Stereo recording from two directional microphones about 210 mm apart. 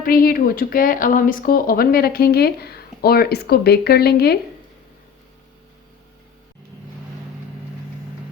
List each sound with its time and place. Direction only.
0.0 s speech: 45° left (ahead or behind)